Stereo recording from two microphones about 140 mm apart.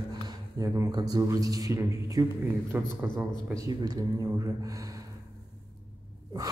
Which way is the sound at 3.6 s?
25° right (ahead or behind).